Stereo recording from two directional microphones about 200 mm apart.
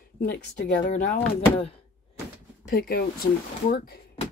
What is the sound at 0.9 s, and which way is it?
Speech, 35° left (ahead or behind).